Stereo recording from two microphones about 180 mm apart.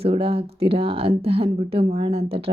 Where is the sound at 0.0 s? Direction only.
30° right (ahead or behind).